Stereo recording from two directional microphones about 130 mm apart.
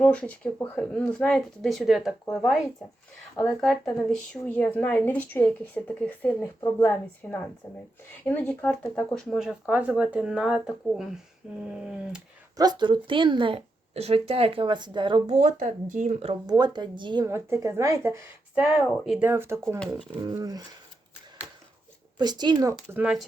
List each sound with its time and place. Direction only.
0.0 s a woman's voice: 10° left (ahead or behind)
9.1 s speech: centre (ahead or behind)
12.5 s a woman's voice: 35° right (ahead or behind)
15.3 s speech: 85° right
16.5 s a woman's voice: 30° right (ahead or behind)
17.2 s speech: 20° right (ahead or behind)
18.5 s speech: centre (ahead or behind)
19.2 s speech: 15° right (ahead or behind)
20.4 s speech: 30° right (ahead or behind)
22.2 s a woman's voice: 35° right (ahead or behind)
23.0 s speech: 5° right (ahead or behind)